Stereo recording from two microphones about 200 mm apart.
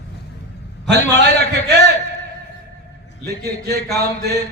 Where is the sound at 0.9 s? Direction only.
60° right (ahead or behind).